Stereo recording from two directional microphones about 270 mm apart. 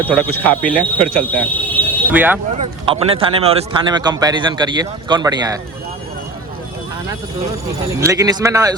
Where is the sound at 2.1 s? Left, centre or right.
Centre.